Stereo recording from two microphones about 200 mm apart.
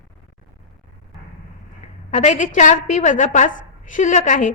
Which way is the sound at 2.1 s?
35° left (ahead or behind).